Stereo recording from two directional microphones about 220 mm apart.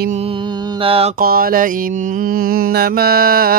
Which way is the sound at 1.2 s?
40° right (ahead or behind).